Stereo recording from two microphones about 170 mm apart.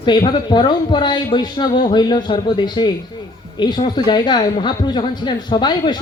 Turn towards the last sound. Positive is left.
turn(degrees=25)  # may be behind; listen again after turning